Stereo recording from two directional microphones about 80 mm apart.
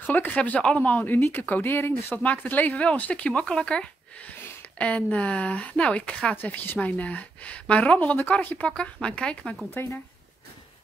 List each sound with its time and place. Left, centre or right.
0.0 s a woman's voice: left
6.3 s a woman's voice: left